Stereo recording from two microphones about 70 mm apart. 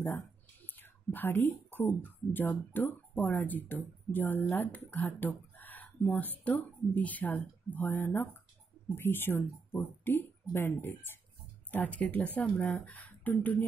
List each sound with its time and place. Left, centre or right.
0.7 s a woman's voice: left; by 12.7 s centre
12.7 s speech: left